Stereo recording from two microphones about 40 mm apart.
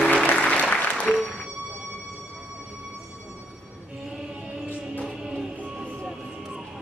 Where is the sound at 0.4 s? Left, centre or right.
Left.